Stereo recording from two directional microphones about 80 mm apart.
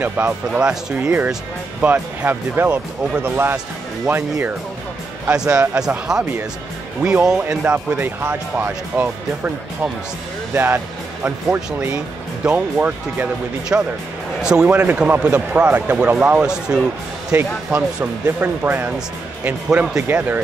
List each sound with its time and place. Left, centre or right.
0.2 s speech: right
0.5 s speech: centre; by 4.6 s right
5.3 s speech: centre
10.5 s speech: right
14.4 s speech: centre
14.7 s speech: right
16.3 s speech: centre
17.4 s speech: centre